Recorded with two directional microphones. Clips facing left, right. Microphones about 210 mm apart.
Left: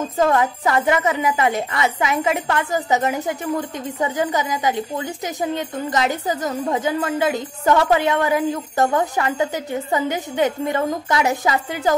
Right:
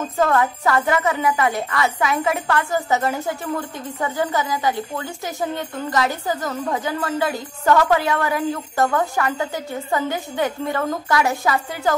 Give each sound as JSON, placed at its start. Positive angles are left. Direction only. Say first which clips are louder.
{"t": 0.2, "sound": "a woman's voice", "louder": "left 1 dB", "side_deg": 20}